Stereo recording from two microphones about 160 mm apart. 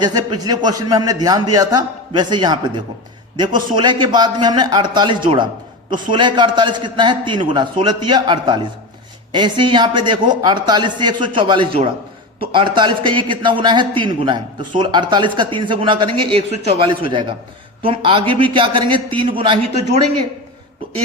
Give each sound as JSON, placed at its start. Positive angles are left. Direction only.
{"t": 0.0, "sound": "a man's voice", "side_deg": -25}